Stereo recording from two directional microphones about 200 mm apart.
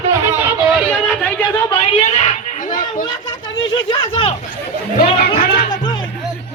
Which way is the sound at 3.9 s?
25° left (ahead or behind).